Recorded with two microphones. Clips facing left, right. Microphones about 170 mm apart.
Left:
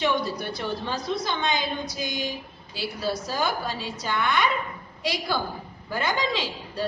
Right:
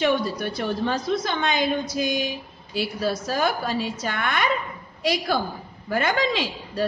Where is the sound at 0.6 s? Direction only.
55° right (ahead or behind).